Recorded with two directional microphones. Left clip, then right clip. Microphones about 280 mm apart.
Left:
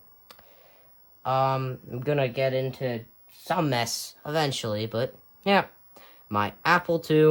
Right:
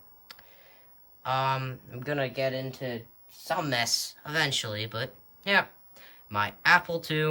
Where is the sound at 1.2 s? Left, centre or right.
Centre.